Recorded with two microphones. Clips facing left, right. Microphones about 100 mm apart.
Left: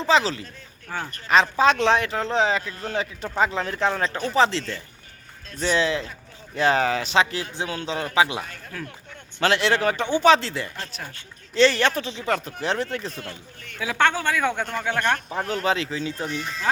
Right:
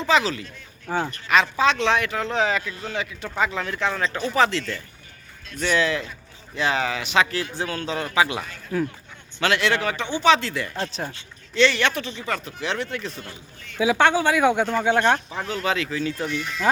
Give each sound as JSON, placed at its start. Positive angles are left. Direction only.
{"t": 0.0, "sound": "speech", "side_deg": 30}
{"t": 0.9, "sound": "speech", "side_deg": -25}
{"t": 1.1, "sound": "speech", "side_deg": 35}
{"t": 2.7, "sound": "speech", "side_deg": 40}
{"t": 6.6, "sound": "speech", "side_deg": 40}
{"t": 8.7, "sound": "speech", "side_deg": -15}
{"t": 9.4, "sound": "speech", "side_deg": 30}
{"t": 10.8, "sound": "speech", "side_deg": -30}
{"t": 11.1, "sound": "speech", "side_deg": 40}
{"t": 13.1, "sound": "speech", "side_deg": 60}
{"t": 13.7, "sound": "speech", "side_deg": -15}
{"t": 15.3, "sound": "speech", "side_deg": 45}
{"t": 16.2, "sound": "speech", "side_deg": 35}